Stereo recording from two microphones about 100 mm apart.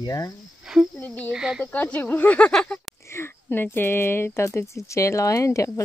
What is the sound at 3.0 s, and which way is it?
Speech, 25° left (ahead or behind).